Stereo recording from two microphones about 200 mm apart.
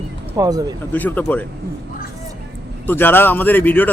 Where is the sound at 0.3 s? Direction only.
20° right (ahead or behind).